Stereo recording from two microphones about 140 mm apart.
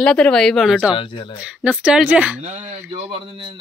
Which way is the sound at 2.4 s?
55° right (ahead or behind).